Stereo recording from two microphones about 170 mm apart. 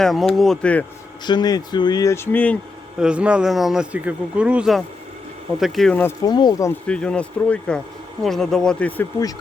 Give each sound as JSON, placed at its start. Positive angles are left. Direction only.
{"t": 0.0, "sound": "speech", "side_deg": 0}
{"t": 1.2, "sound": "speech", "side_deg": 25}
{"t": 3.0, "sound": "speech", "side_deg": -5}
{"t": 6.2, "sound": "speech", "side_deg": 25}
{"t": 6.7, "sound": "speech", "side_deg": 5}